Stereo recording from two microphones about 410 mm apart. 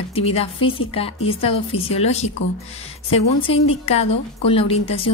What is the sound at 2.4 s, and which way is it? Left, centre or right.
Speech, left.